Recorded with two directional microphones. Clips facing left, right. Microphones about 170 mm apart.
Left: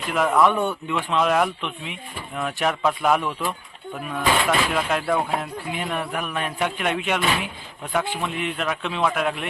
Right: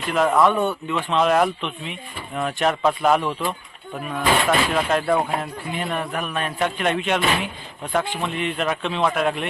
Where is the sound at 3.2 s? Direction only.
20° right (ahead or behind).